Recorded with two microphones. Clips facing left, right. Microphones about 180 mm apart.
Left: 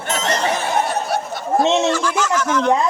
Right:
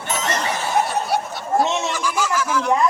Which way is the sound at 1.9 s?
10° right (ahead or behind).